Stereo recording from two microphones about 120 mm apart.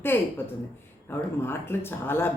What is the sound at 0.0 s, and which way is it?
A woman's voice, 15° left (ahead or behind).